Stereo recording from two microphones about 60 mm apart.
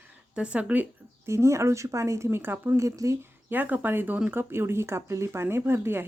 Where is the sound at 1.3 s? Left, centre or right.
Right.